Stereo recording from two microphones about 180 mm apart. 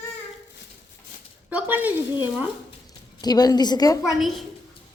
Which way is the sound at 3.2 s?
20° left (ahead or behind).